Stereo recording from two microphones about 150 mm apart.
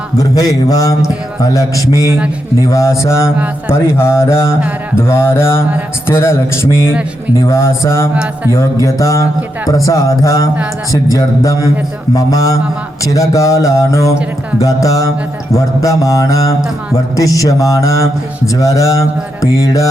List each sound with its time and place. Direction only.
0.2 s mantra: 25° left (ahead or behind)
3.7 s speech: 15° left (ahead or behind)
8.4 s mantra: 20° left (ahead or behind)